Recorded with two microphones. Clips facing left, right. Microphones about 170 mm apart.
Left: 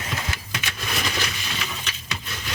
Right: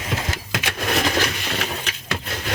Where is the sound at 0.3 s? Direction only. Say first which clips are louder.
Right 5 dB; 50° right (ahead or behind).